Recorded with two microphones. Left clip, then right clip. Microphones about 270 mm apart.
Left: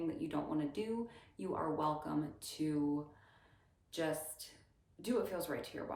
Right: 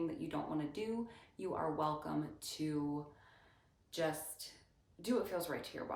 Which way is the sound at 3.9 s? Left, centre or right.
Centre.